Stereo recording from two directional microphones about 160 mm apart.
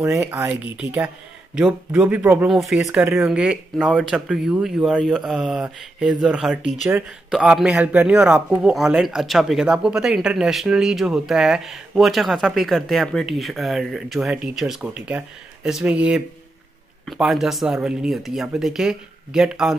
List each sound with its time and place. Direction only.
0.0 s speech: 15° right (ahead or behind)